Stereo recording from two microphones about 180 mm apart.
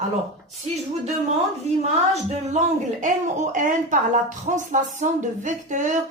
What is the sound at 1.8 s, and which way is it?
Speech, 40° right (ahead or behind).